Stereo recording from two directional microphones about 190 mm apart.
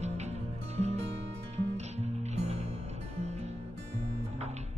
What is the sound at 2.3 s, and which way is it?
Music, 35° right (ahead or behind).